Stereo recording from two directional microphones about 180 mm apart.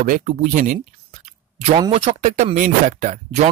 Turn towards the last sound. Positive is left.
turn(degrees=-45)  # may be behind; listen again after turning